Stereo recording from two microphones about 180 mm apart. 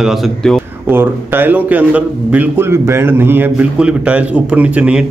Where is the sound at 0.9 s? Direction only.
10° right (ahead or behind).